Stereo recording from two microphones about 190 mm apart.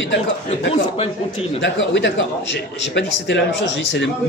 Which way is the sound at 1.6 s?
70° left (ahead or behind).